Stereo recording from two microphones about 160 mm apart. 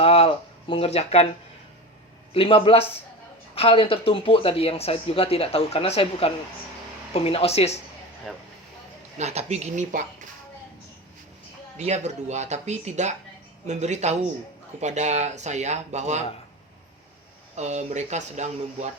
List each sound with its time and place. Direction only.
0.0 s a sound: 35° left (ahead or behind)
2.3 s a man's voice: 35° left (ahead or behind)
9.1 s speech: 45° right (ahead or behind)
11.8 s speech: 45° right (ahead or behind)
17.5 s speech: 45° right (ahead or behind)